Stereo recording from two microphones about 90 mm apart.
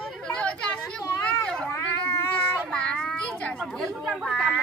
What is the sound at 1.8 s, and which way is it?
Speech, 25° left (ahead or behind).